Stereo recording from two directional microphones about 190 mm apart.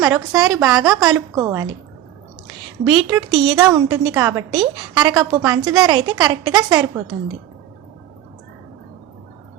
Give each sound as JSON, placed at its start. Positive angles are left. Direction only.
{"t": 0.3, "sound": "a woman's voice", "side_deg": -20}
{"t": 0.9, "sound": "a woman's voice", "side_deg": 0}
{"t": 1.4, "sound": "a woman's voice", "side_deg": -15}
{"t": 2.8, "sound": "a woman's voice", "side_deg": -20}